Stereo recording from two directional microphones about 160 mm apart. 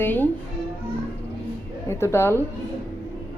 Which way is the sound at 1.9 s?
15° left (ahead or behind).